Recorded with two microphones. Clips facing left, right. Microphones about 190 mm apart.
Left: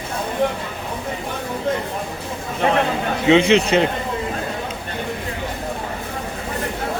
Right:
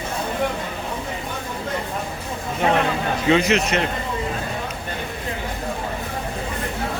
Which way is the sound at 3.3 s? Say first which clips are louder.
Left 5 dB; 30° left (ahead or behind).